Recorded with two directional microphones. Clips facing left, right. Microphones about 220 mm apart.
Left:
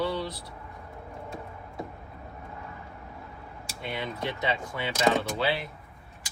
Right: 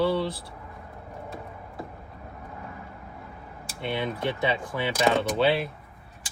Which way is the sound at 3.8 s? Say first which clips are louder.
Right 5 dB; 25° right (ahead or behind).